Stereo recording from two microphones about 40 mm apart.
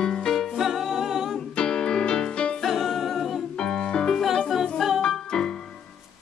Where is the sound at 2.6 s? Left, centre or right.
Centre.